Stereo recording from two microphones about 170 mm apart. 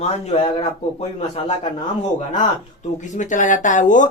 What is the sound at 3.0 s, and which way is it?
Speech, 45° left (ahead or behind).